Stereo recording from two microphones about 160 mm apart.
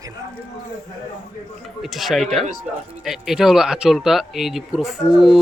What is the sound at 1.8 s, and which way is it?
Speech, centre (ahead or behind).